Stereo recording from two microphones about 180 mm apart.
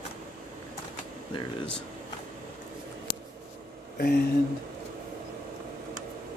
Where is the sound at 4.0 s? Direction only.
60° left (ahead or behind).